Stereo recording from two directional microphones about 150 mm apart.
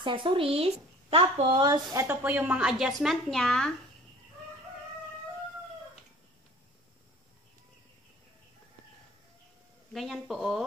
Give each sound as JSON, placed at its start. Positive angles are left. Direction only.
{"t": 0.0, "sound": "speech", "side_deg": -35}
{"t": 2.0, "sound": "speech", "side_deg": -15}
{"t": 9.9, "sound": "speech", "side_deg": 0}